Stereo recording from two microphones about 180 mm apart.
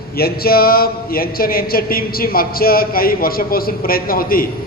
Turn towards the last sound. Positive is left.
turn(degrees=55)  # may be behind; listen again after turning